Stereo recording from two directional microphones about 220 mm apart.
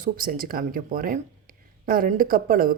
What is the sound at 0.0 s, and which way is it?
Speech, 40° right (ahead or behind).